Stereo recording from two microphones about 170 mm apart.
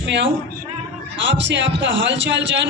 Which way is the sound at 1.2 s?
90° right.